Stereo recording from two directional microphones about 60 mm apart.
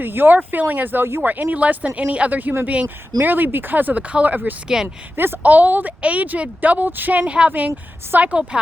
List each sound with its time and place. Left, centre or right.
0.0 s speech: right
4.7 s speech: centre
5.1 s speech: right
7.2 s speech: centre